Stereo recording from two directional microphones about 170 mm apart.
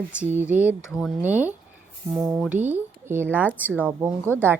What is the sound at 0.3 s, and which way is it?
Speech, 10° right (ahead or behind).